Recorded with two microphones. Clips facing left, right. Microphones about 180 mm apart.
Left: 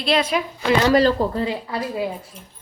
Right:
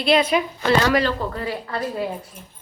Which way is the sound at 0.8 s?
35° left (ahead or behind).